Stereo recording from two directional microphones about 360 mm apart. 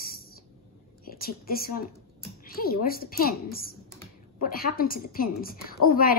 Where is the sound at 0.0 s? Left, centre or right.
Left.